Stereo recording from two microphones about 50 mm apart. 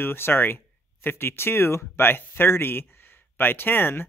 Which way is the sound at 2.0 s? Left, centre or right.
Left.